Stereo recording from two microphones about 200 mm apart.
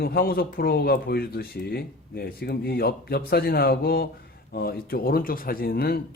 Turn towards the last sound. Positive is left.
turn(degrees=50)  # may be behind; listen again after turning